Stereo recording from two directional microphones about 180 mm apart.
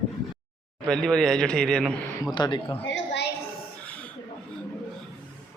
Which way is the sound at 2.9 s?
70° left (ahead or behind).